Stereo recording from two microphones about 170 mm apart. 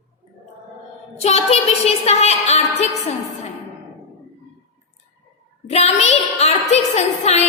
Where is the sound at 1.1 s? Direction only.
40° left (ahead or behind).